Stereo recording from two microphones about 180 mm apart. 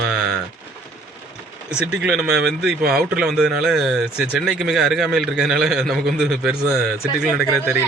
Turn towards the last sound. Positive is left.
turn(degrees=-5)  # may be behind; listen again after turning